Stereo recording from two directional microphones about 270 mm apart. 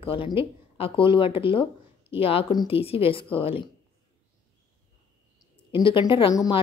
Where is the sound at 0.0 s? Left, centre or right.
Centre.